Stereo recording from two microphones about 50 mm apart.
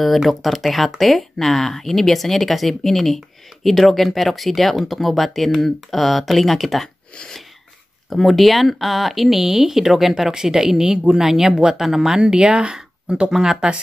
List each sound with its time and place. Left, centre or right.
0.0 s speech: centre
8.1 s speech: centre
12.2 s speech: centre